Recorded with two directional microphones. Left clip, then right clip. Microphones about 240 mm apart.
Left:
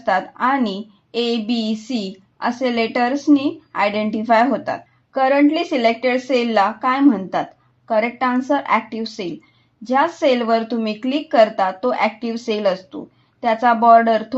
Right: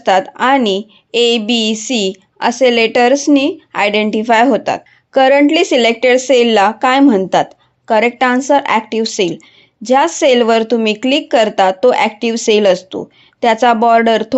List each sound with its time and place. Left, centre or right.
0.0 s a woman's voice: right